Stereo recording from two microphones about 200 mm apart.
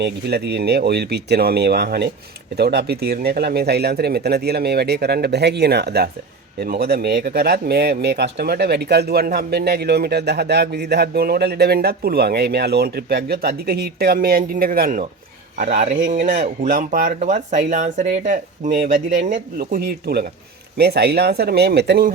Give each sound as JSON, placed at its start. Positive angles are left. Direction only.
{"t": 0.0, "sound": "speech", "side_deg": -55}